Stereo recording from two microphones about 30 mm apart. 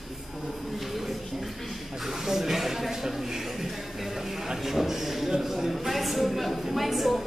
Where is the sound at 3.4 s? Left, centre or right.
Centre.